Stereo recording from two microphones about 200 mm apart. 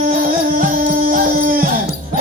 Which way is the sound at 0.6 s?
45° right (ahead or behind).